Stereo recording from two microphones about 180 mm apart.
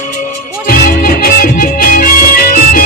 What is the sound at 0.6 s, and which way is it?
Music, 55° left (ahead or behind).